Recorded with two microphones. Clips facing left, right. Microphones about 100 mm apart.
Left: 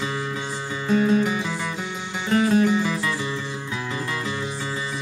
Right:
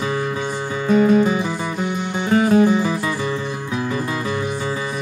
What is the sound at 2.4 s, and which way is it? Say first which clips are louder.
Music: right 4 dB; 55° right (ahead or behind).